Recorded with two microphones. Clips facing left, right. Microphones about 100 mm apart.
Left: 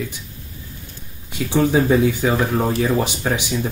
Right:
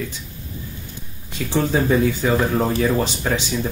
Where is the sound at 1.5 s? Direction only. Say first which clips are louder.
Left 3 dB; 15° left (ahead or behind).